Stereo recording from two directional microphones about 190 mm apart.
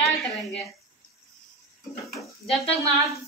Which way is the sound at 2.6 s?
30° left (ahead or behind).